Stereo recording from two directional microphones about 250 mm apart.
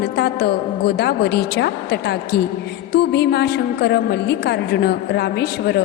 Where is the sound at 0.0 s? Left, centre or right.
Left.